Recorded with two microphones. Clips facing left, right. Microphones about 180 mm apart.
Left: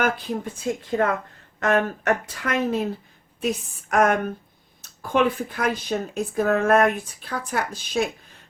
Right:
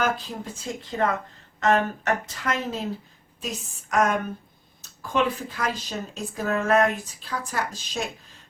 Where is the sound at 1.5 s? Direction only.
55° left (ahead or behind).